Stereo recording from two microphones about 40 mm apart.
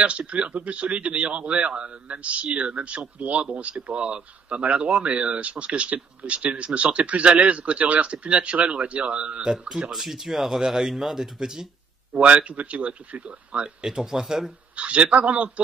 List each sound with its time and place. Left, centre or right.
0.0 s speech: right
9.9 s speech: centre
12.1 s speech: right
13.8 s speech: centre
14.8 s speech: right